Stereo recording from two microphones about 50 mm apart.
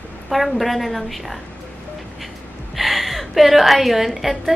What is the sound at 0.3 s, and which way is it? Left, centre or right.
A woman's voice, centre.